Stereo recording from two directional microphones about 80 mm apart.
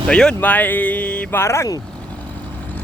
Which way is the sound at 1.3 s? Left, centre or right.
Left.